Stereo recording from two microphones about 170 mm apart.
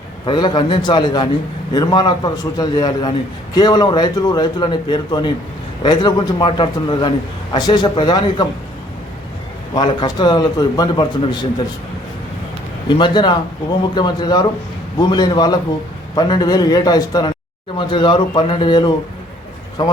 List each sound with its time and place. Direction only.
0.3 s a man's voice: 25° left (ahead or behind)
9.7 s a man's voice: 25° left (ahead or behind)
12.9 s a man's voice: 25° left (ahead or behind)